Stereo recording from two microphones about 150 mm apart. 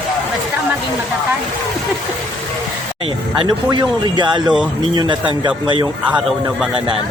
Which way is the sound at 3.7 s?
30° right (ahead or behind).